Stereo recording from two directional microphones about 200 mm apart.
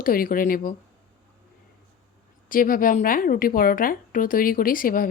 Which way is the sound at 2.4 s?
45° left (ahead or behind).